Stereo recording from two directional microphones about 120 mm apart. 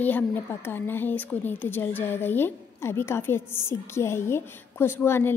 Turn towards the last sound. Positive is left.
turn(degrees=20)  # may be behind; listen again after turning